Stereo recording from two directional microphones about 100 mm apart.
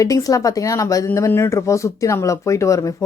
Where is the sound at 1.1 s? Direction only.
25° left (ahead or behind).